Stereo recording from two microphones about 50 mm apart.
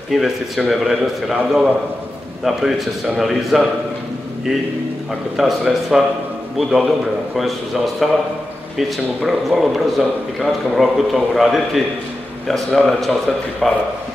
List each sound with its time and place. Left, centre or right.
0.1 s a man's voice: centre
5.4 s a man's voice: centre